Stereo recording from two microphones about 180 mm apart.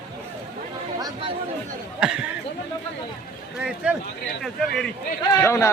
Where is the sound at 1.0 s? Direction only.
20° right (ahead or behind).